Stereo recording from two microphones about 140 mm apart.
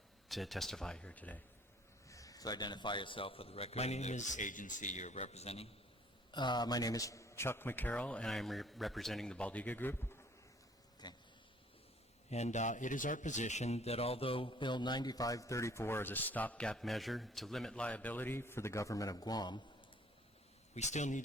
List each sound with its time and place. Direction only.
0.3 s speech: centre (ahead or behind)
2.0 s a man's voice: 25° left (ahead or behind); by 5.7 s 45° left (ahead or behind)
6.3 s a man's voice: 30° left (ahead or behind); by 10.2 s 15° left (ahead or behind)
11.0 s a sound: 30° left (ahead or behind)
12.3 s a man's voice: 55° left (ahead or behind); by 19.6 s 30° left (ahead or behind)
20.7 s speech: 55° left (ahead or behind)